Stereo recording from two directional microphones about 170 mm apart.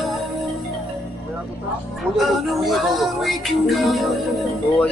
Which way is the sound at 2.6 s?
Centre (ahead or behind).